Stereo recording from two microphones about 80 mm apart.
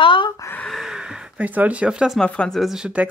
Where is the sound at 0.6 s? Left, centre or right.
Centre.